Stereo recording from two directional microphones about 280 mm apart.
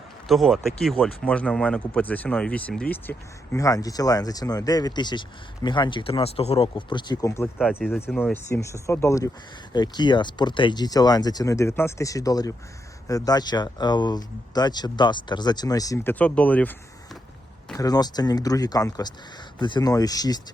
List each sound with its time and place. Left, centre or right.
0.3 s speech: centre
7.6 s speech: centre
7.9 s speech: centre
17.7 s speech: centre